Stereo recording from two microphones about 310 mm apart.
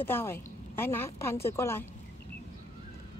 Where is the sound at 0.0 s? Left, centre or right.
Centre.